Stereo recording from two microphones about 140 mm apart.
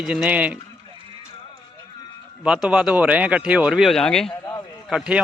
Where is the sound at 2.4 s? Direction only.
5° right (ahead or behind).